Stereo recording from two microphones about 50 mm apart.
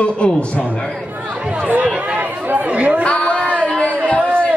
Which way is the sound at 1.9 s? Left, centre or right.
Right.